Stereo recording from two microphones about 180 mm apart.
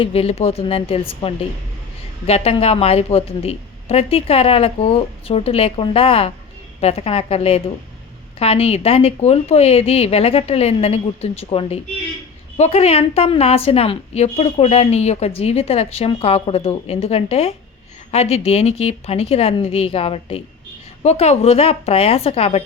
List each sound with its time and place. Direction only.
0.0 s a woman's voice: 35° left (ahead or behind)